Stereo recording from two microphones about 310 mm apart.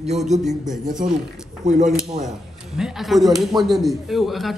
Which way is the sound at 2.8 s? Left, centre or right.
Centre.